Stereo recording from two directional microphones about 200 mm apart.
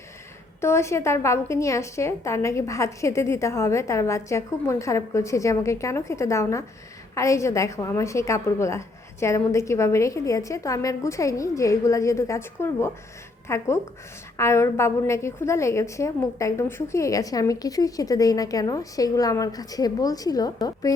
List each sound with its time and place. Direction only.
0.6 s a woman's voice: 15° left (ahead or behind)